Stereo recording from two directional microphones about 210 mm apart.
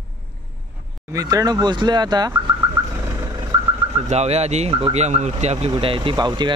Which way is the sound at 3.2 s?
15° right (ahead or behind).